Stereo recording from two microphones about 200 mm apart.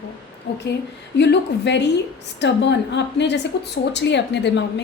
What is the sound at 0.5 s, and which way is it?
A woman's voice, 55° left (ahead or behind).